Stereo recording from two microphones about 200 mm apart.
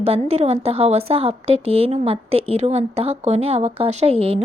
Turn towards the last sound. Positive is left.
turn(degrees=-30)  # may be behind; listen again after turning